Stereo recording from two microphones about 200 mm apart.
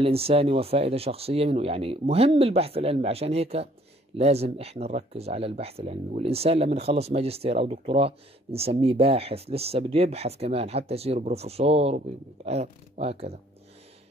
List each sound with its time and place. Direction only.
0.0 s speech: 30° right (ahead or behind)